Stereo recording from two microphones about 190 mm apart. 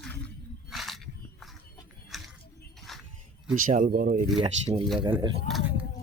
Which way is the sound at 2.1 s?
Centre (ahead or behind).